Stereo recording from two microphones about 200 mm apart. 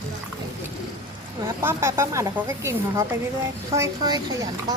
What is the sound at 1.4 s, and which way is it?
Speech, 10° right (ahead or behind).